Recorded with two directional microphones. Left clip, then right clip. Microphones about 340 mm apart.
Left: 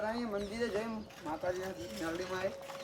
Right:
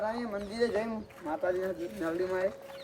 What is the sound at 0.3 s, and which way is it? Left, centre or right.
Speech, right.